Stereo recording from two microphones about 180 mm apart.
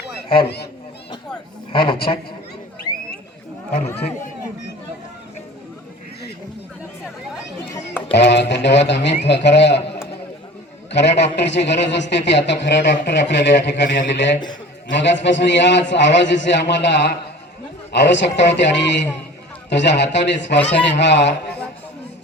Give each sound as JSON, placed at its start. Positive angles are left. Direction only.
{"t": 0.3, "sound": "speech", "side_deg": 60}
{"t": 3.8, "sound": "speech", "side_deg": 40}
{"t": 8.1, "sound": "speech", "side_deg": 75}
{"t": 10.9, "sound": "a man's voice", "side_deg": 75}